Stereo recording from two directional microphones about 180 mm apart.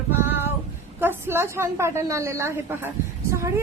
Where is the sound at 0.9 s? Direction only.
10° right (ahead or behind).